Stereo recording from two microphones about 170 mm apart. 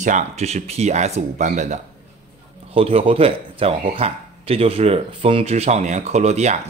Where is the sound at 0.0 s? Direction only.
45° right (ahead or behind).